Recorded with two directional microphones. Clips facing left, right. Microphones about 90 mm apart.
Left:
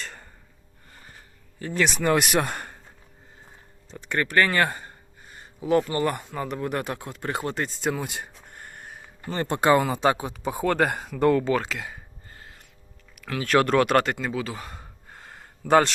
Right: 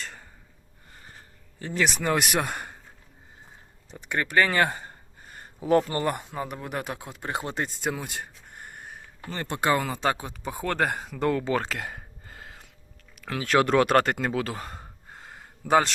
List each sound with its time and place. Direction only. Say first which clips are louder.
0.0 s a sound: left 1 dB; centre (ahead or behind)
1.5 s speech: left 2 dB; 25° right (ahead or behind)
1.8 s speech: left 3 dB; 5° right (ahead or behind)
3.9 s speech: left 1 dB; 15° right (ahead or behind)
5.5 s speech: even; 35° right (ahead or behind)
6.1 s speech: left 1 dB; 15° right (ahead or behind)
7.8 s speech: left 3 dB; centre (ahead or behind)
8.6 s a sound: even; 5° right (ahead or behind)
9.3 s speech: left 5 dB; 30° left (ahead or behind); by 11.4 s centre (ahead or behind)
11.5 s a sound: left 1 dB; 40° right (ahead or behind); by 12.5 s 90° right
13.2 s speech: left 1 dB; 25° right (ahead or behind)
13.8 s speech: even; 35° right (ahead or behind)
14.8 s gasp: right 1 dB; 20° right (ahead or behind)
15.4 s a sound: left 3 dB; 5° right (ahead or behind)